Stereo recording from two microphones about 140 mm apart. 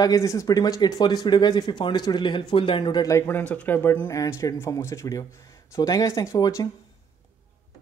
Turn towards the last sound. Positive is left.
turn(degrees=25)  # may be behind; listen again after turning